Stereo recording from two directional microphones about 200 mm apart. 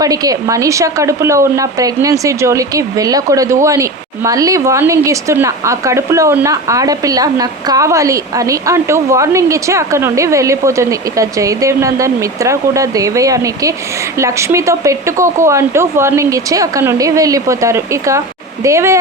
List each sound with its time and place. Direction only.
0.0 s speech: 15° right (ahead or behind)